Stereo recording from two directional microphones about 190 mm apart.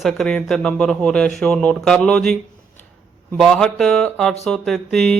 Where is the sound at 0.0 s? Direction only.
Centre (ahead or behind).